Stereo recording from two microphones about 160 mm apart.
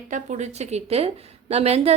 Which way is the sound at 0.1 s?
50° right (ahead or behind).